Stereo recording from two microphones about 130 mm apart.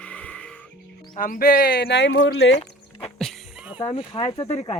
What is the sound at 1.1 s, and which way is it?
Speech, 85° left.